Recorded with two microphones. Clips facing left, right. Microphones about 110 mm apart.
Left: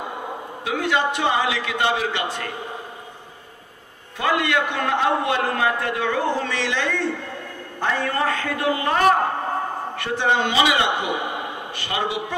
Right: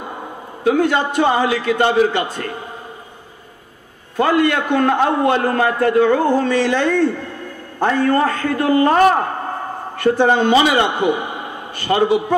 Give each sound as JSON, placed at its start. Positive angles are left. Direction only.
{"t": 0.7, "sound": "a man's voice", "side_deg": -40}
{"t": 4.2, "sound": "a man's voice", "side_deg": -40}